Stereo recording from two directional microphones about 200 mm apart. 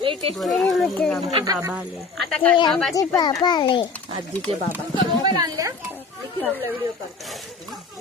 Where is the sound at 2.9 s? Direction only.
20° left (ahead or behind).